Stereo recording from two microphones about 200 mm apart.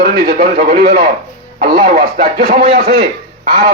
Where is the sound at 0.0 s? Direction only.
45° right (ahead or behind).